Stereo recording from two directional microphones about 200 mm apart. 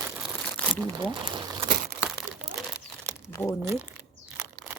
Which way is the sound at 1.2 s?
25° right (ahead or behind).